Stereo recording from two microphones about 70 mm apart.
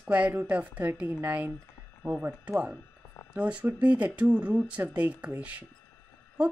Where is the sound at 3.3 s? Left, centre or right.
Centre.